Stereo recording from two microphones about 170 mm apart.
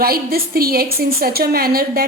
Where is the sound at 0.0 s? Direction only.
60° right (ahead or behind).